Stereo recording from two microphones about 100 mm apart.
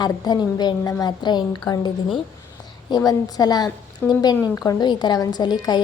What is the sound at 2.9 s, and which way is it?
A woman's voice, 40° left (ahead or behind).